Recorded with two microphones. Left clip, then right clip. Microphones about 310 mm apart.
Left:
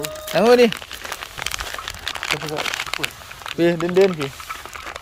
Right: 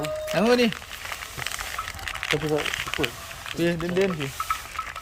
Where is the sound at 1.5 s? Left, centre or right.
Left.